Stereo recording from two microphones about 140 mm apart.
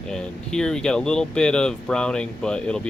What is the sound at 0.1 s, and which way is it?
Speech, 5° left (ahead or behind).